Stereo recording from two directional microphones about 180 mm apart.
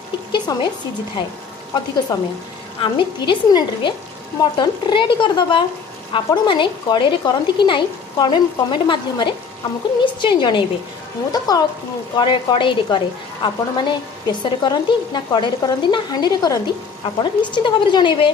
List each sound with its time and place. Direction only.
0.3 s speech: 25° left (ahead or behind)
2.1 s a woman's voice: 20° left (ahead or behind)